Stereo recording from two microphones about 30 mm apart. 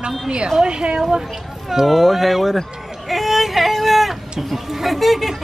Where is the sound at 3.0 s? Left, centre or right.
Centre.